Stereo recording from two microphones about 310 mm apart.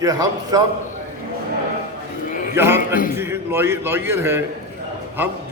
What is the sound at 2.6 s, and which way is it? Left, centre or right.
A man's voice, centre.